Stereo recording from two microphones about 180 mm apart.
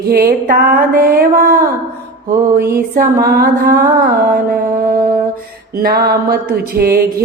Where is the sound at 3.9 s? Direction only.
50° right (ahead or behind).